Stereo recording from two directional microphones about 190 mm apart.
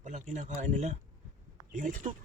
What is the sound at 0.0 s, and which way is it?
Speech, 40° right (ahead or behind).